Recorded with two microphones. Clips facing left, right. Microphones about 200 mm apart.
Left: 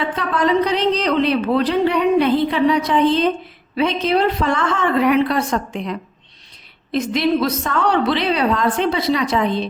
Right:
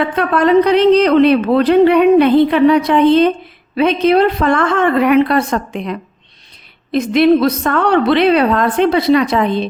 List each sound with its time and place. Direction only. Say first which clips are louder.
0.0 s speech: right 6 dB; 60° right (ahead or behind)